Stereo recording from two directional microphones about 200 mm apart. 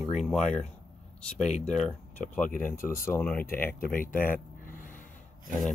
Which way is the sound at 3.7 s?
45° left (ahead or behind).